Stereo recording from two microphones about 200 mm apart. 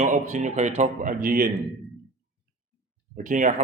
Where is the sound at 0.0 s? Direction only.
40° right (ahead or behind).